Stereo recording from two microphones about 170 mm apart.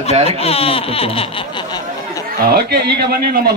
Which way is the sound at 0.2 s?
35° left (ahead or behind).